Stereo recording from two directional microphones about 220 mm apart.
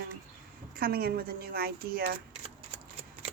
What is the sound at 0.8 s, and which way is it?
Speech, 45° right (ahead or behind).